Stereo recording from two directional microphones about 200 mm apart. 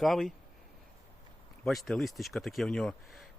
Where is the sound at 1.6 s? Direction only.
Centre (ahead or behind).